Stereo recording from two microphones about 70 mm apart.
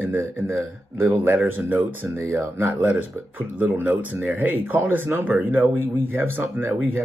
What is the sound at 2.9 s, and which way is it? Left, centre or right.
Speech, right.